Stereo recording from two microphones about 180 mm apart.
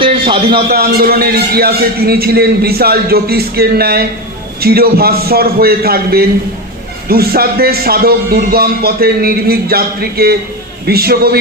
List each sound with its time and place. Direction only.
0.0 s a man's voice: 30° right (ahead or behind)
0.7 s a man's voice: 55° right (ahead or behind)